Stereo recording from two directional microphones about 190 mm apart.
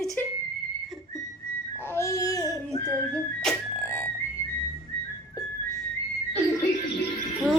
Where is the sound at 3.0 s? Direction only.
10° left (ahead or behind).